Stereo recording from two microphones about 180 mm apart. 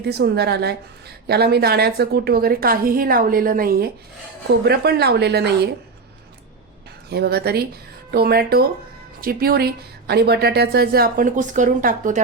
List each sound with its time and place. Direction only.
0.0 s a woman's voice: 65° right (ahead or behind)
7.1 s a woman's voice: 60° right (ahead or behind); by 12.2 s 45° right (ahead or behind)